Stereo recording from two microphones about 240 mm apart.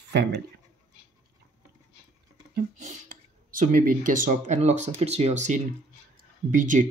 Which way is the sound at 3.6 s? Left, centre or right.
Right.